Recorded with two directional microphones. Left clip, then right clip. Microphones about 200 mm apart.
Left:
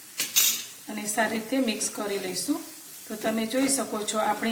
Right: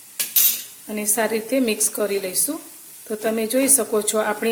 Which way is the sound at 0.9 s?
50° right (ahead or behind).